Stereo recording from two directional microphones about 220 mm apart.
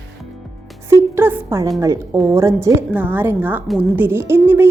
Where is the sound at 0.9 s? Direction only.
10° right (ahead or behind).